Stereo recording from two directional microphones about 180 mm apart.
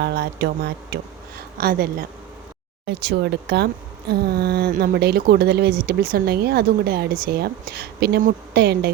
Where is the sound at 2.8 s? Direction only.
70° right (ahead or behind).